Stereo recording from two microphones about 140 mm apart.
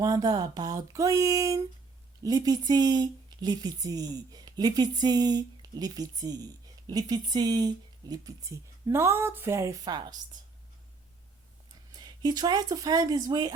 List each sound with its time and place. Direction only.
0.0 s speech: 25° right (ahead or behind)
11.9 s speech: 30° right (ahead or behind)